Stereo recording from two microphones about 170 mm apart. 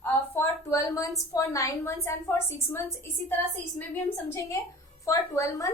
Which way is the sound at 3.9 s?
15° left (ahead or behind).